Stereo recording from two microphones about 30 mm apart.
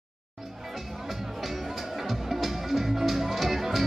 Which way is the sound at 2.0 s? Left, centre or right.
Centre.